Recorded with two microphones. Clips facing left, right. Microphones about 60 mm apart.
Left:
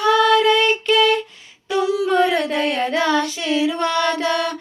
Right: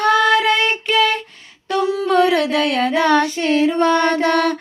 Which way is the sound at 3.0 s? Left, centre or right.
Right.